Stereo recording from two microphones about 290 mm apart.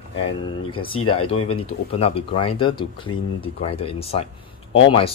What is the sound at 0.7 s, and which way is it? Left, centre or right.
Speech, centre.